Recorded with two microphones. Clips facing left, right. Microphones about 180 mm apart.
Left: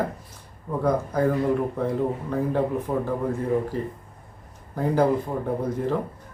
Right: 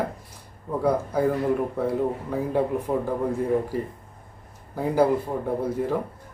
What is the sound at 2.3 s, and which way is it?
Speech, 10° right (ahead or behind).